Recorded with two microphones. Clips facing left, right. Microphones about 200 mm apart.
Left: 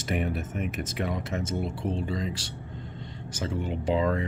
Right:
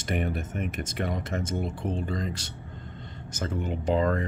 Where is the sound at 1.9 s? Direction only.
45° right (ahead or behind).